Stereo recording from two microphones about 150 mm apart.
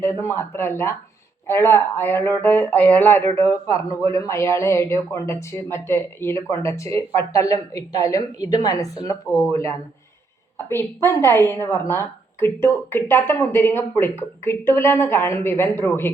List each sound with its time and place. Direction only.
0.0 s a woman's voice: 15° left (ahead or behind)
10.7 s a woman's voice: 15° left (ahead or behind)